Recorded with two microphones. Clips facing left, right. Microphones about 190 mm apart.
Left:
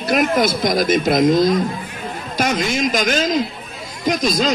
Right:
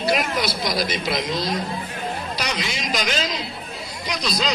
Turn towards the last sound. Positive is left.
turn(degrees=50)  # may be behind; listen again after turning